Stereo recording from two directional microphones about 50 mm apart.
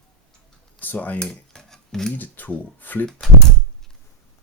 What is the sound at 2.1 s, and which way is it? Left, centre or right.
Speech, left.